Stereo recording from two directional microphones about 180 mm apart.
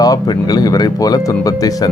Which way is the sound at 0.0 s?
20° left (ahead or behind).